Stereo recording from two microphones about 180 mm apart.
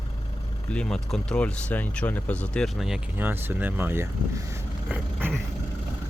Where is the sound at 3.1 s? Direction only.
10° right (ahead or behind).